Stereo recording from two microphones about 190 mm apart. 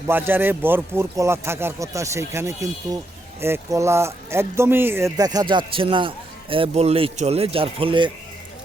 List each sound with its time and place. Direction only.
0.1 s speech: 10° right (ahead or behind); by 8.1 s 25° right (ahead or behind)